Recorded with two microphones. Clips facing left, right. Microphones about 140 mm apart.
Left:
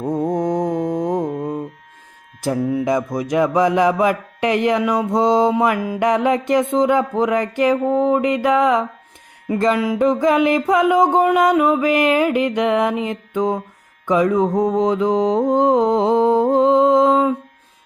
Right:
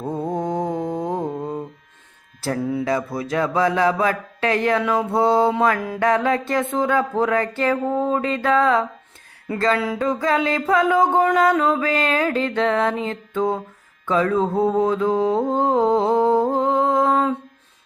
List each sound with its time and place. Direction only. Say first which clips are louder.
0.0 s mantra: left 5 dB; 15° left (ahead or behind)
2.4 s music: left 4 dB; 15° left (ahead or behind)
14.1 s mantra: left 3 dB; 15° left (ahead or behind)